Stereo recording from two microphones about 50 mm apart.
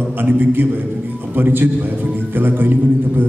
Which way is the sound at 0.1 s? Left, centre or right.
Right.